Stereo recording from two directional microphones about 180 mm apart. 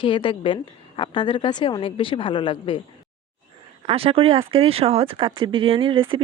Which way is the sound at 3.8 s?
30° right (ahead or behind).